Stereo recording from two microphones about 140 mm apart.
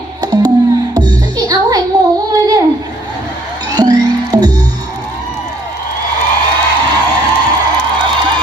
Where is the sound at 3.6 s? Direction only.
30° right (ahead or behind).